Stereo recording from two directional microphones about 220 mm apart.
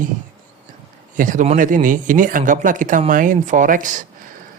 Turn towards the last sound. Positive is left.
turn(degrees=-35)  # may be behind; listen again after turning